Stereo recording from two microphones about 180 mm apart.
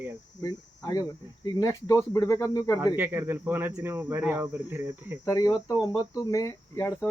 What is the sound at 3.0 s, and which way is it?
Speech, 10° right (ahead or behind).